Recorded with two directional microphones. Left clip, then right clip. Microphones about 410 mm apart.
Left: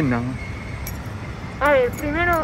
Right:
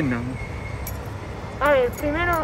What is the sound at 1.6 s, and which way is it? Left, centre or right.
Speech, centre.